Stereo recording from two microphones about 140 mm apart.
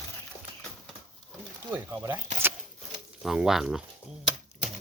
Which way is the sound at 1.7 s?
15° right (ahead or behind).